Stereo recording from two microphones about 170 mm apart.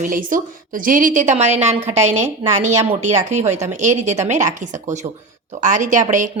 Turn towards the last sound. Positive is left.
turn(degrees=-45)  # may be behind; listen again after turning